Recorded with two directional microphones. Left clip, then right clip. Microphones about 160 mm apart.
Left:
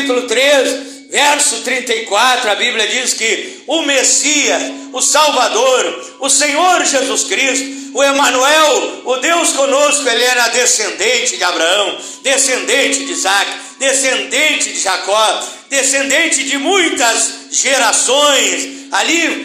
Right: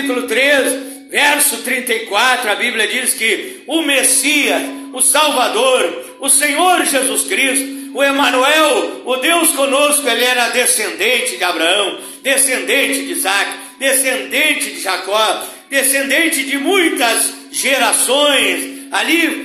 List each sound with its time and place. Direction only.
0.1 s speech: 15° right (ahead or behind)